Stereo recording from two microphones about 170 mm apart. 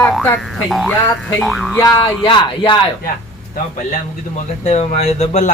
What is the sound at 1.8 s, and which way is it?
Speech, 20° left (ahead or behind).